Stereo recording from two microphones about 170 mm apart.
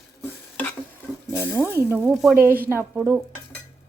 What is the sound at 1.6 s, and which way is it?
Speech, 10° right (ahead or behind).